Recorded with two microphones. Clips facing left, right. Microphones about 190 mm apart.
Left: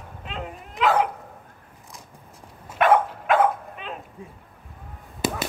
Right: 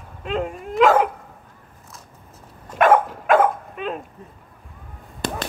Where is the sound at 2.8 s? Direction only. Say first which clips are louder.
Right 3 dB; 45° right (ahead or behind).